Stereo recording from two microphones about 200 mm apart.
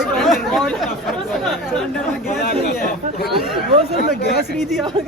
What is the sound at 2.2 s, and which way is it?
Speech, 50° left (ahead or behind).